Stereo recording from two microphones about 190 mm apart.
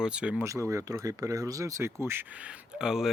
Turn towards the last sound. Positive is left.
turn(degrees=0)  # may be behind; listen again after turning